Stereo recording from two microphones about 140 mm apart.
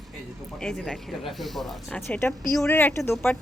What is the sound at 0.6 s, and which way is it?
A woman's voice, 5° left (ahead or behind).